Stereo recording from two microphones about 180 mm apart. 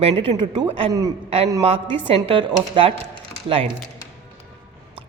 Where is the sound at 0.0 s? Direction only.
30° right (ahead or behind).